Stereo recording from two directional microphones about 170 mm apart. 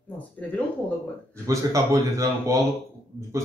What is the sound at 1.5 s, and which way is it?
A man's voice, 20° right (ahead or behind).